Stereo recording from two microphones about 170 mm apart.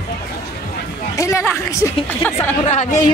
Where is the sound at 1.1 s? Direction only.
20° left (ahead or behind).